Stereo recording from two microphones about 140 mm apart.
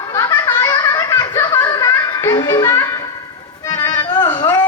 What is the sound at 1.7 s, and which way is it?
Music, 25° left (ahead or behind).